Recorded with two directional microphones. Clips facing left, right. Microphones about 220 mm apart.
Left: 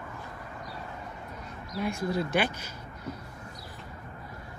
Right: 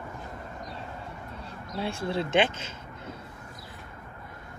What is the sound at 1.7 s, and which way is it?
Speech, 30° right (ahead or behind).